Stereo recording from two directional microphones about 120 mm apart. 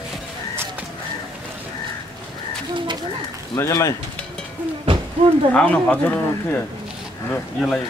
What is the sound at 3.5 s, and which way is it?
Speech, 25° left (ahead or behind).